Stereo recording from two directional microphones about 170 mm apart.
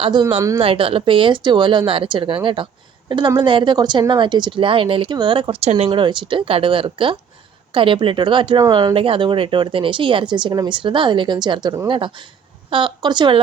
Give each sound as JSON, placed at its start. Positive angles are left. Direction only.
{"t": 0.0, "sound": "speech", "side_deg": -25}